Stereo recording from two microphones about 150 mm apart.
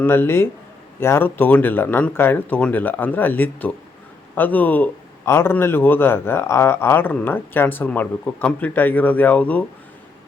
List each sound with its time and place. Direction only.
0.0 s a man's voice: 15° left (ahead or behind)